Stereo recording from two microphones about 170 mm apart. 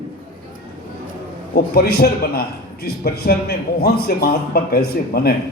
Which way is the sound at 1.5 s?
65° left (ahead or behind).